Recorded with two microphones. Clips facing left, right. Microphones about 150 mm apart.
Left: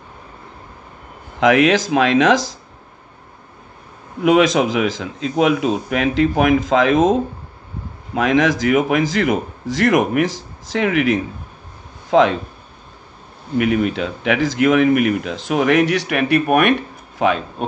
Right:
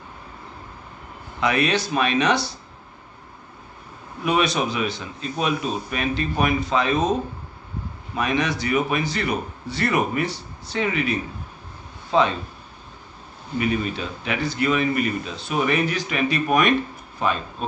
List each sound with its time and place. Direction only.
1.4 s speech: 90° left
4.2 s speech: 90° left
13.6 s speech: 90° left; by 16.7 s 60° left (ahead or behind)
17.2 s speech: 80° left